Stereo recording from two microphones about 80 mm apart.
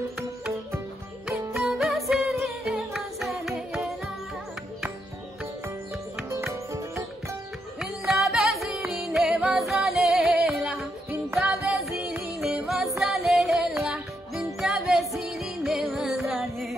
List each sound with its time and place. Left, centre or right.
1.5 s music: centre
6.3 s music: right
7.8 s music: centre
11.1 s music: right
12.6 s music: centre